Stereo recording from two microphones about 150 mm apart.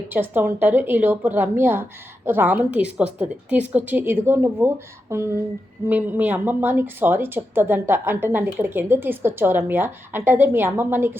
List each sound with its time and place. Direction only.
0.1 s speech: 15° right (ahead or behind)